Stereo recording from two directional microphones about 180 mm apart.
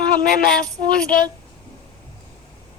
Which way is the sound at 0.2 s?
50° left (ahead or behind).